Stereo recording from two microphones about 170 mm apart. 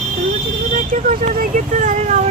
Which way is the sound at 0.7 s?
45° right (ahead or behind).